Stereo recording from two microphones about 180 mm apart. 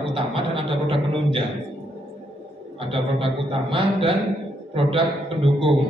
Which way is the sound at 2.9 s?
30° right (ahead or behind).